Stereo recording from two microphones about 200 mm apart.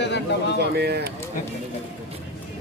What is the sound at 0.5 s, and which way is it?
Speech, 55° right (ahead or behind).